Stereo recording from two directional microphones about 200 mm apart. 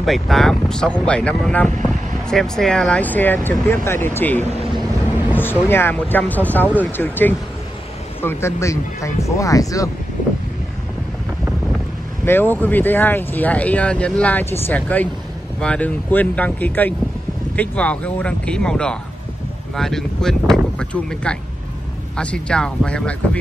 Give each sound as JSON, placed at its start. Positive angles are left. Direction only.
{"t": 0.0, "sound": "speech", "side_deg": 0}
{"t": 12.3, "sound": "speech", "side_deg": 10}